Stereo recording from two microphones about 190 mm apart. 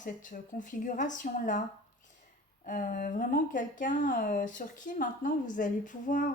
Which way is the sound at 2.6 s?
45° left (ahead or behind).